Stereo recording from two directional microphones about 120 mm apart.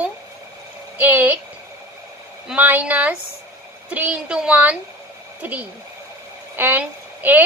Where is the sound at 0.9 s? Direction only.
15° right (ahead or behind).